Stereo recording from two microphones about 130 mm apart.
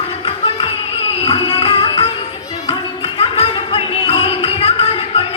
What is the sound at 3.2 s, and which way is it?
Music, 45° left (ahead or behind).